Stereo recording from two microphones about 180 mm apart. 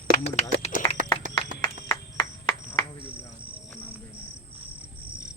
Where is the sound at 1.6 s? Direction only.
25° left (ahead or behind).